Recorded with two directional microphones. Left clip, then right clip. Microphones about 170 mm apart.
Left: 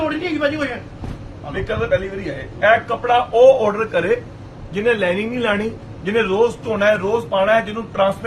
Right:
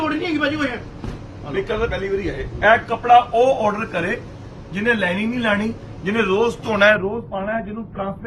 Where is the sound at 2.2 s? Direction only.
35° left (ahead or behind).